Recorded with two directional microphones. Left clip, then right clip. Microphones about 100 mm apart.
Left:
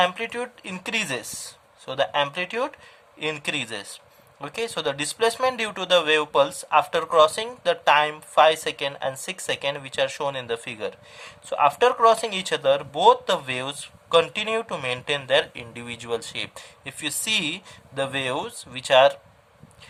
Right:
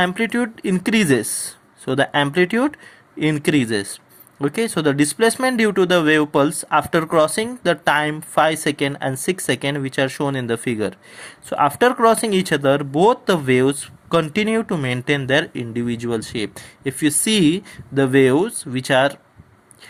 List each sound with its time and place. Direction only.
0.0 s speech: 45° right (ahead or behind)
15.7 s speech: 20° right (ahead or behind)